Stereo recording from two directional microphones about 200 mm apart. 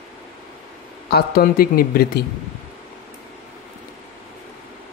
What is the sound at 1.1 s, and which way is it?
Speech, 50° left (ahead or behind).